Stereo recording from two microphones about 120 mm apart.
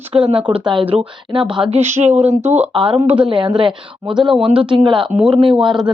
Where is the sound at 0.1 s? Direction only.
50° right (ahead or behind).